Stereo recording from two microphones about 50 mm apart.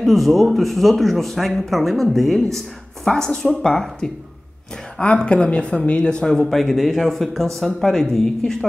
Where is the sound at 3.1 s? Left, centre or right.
Centre.